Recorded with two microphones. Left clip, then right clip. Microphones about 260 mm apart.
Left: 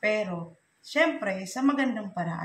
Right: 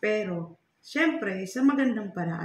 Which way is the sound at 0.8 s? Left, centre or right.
Centre.